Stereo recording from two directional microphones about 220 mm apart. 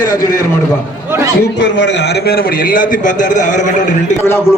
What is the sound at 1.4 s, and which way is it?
A man's voice, 55° left (ahead or behind).